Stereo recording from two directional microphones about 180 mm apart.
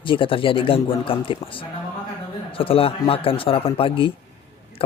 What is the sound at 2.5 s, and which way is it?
A man's voice, 30° left (ahead or behind).